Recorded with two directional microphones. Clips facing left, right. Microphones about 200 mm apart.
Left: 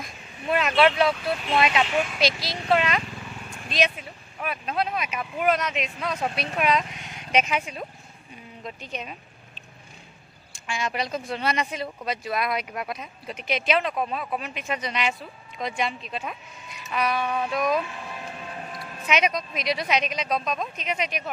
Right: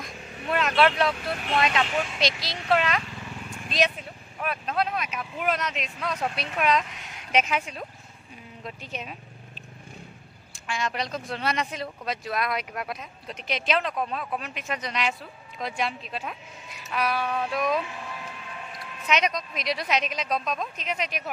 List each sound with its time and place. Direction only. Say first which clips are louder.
0.0 s vehicle: left 1 dB; 5° left (ahead or behind)
1.6 s speech: left 2 dB; 10° left (ahead or behind)
4.4 s speech: even; centre (ahead or behind)
10.7 s speech: left 1 dB; 5° left (ahead or behind)
18.2 s a sound: left 4 dB; 40° left (ahead or behind)
19.0 s speech: left 1 dB; 5° left (ahead or behind)